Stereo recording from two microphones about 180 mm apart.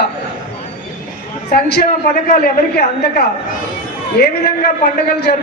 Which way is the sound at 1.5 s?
60° left (ahead or behind).